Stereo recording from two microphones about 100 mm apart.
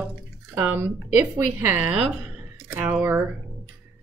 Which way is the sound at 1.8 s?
10° right (ahead or behind).